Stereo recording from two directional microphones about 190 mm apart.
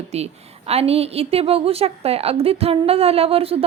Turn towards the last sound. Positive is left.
turn(degrees=-30)  # may be behind; listen again after turning